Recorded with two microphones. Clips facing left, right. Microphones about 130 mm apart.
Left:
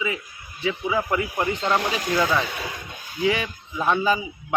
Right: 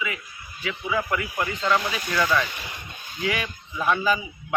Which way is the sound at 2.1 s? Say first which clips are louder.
Even; 25° left (ahead or behind).